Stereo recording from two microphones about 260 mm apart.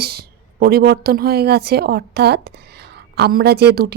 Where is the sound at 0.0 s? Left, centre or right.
Right.